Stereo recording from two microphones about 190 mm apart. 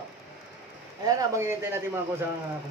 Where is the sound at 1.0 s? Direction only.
20° right (ahead or behind).